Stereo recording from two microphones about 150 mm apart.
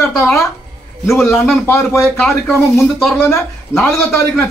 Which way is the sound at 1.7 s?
15° left (ahead or behind).